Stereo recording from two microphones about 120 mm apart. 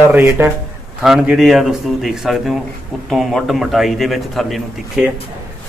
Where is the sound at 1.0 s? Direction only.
5° right (ahead or behind).